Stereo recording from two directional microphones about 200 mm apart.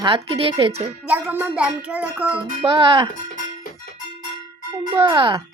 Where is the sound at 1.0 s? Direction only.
10° right (ahead or behind).